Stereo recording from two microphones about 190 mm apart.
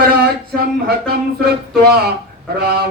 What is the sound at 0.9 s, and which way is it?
Mantra, 55° right (ahead or behind).